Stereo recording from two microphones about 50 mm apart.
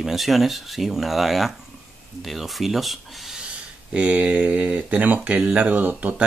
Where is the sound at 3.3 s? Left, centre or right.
Right.